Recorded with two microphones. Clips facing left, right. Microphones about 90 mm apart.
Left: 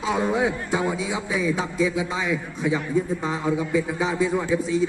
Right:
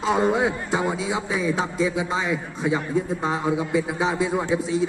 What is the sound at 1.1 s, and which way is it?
Speech, 35° right (ahead or behind).